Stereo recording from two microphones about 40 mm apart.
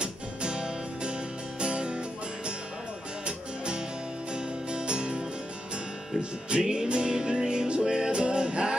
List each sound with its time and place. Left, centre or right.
0.0 s music: right
3.3 s music: right
6.5 s music: centre